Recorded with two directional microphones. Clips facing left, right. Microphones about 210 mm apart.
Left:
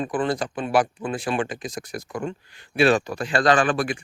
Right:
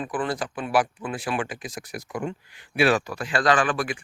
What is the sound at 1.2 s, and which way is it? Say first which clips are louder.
Speech: left 3 dB; 5° right (ahead or behind).